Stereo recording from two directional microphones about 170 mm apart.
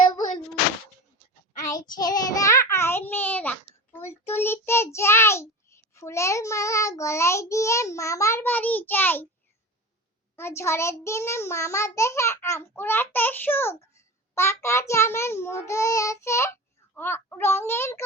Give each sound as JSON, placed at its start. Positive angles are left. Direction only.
{"t": 2.0, "sound": "child singing", "side_deg": 20}
{"t": 10.3, "sound": "child singing", "side_deg": 15}
{"t": 16.9, "sound": "a sound", "side_deg": 10}